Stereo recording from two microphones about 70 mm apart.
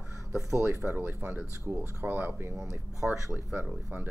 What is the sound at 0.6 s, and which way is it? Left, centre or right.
Speech, right.